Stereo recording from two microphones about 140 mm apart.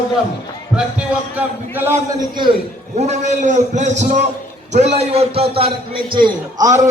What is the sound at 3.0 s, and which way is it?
A man's voice, 55° right (ahead or behind).